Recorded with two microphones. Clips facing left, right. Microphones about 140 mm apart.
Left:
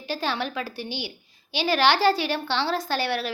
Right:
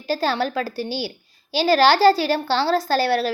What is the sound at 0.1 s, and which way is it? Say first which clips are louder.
A woman's voice: right 6 dB; 35° right (ahead or behind).